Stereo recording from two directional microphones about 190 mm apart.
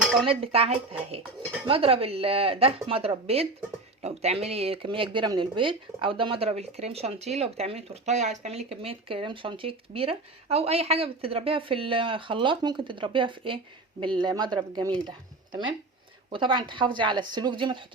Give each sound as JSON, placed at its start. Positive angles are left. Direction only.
{"t": 0.0, "sound": "dishes", "side_deg": 0}
{"t": 0.3, "sound": "speech", "side_deg": -30}
{"t": 16.3, "sound": "speech", "side_deg": -25}